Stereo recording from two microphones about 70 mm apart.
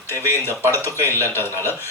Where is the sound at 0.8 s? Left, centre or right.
Left.